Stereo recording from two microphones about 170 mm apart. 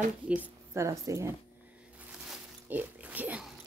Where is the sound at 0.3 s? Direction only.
15° right (ahead or behind).